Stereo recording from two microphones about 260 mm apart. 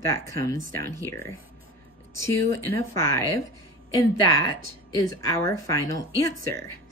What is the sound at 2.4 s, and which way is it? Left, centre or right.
Speech, right.